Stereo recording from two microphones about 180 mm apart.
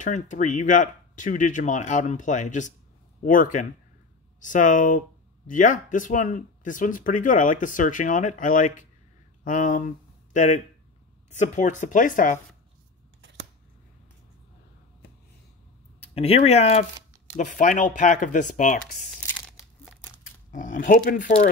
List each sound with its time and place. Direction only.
0.0 s speech: 45° left (ahead or behind)
13.2 s scissors: 90° right
16.0 s speech: 35° left (ahead or behind)
20.5 s speech: 45° left (ahead or behind)